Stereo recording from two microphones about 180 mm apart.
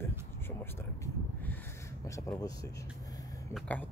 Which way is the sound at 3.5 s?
10° left (ahead or behind).